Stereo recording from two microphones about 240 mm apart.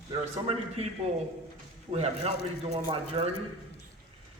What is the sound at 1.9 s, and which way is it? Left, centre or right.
A man's voice, right.